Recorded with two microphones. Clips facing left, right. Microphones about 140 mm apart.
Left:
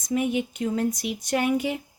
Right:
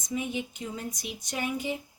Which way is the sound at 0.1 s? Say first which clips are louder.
Left 7 dB; 65° left (ahead or behind).